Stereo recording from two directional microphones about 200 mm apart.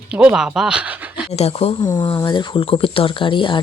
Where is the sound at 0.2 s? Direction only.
5° right (ahead or behind).